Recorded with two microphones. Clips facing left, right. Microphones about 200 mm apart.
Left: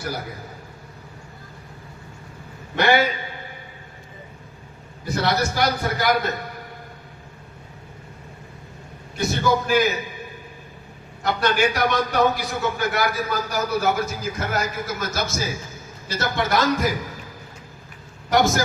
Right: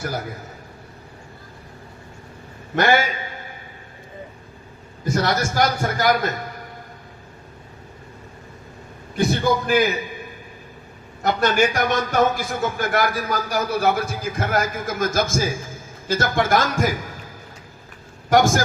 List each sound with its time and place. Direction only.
2.7 s speech: 45° right (ahead or behind)
5.0 s speech: 45° right (ahead or behind)
9.1 s a man's voice: 55° right (ahead or behind)
11.2 s speech: 45° right (ahead or behind)
18.3 s speech: 50° right (ahead or behind)